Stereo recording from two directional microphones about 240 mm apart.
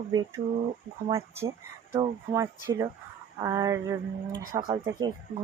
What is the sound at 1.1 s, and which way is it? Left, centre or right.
Speech, centre.